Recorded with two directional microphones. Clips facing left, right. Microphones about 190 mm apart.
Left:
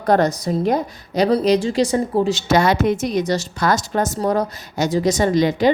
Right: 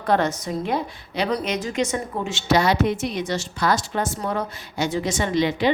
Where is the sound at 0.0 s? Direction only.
40° left (ahead or behind).